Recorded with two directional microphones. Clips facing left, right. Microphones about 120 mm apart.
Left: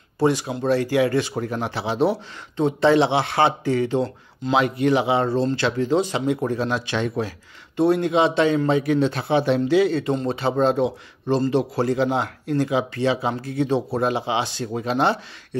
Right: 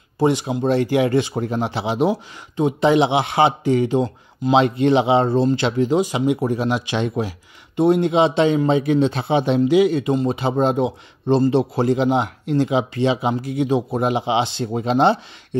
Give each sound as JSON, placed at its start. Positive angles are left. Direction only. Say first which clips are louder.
{"t": 0.2, "sound": "speech", "louder": "right 2 dB", "side_deg": -20}
{"t": 4.6, "sound": "speech", "louder": "right 3 dB", "side_deg": -25}